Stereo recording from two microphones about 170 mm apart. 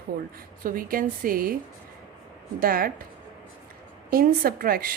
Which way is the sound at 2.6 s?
55° right (ahead or behind).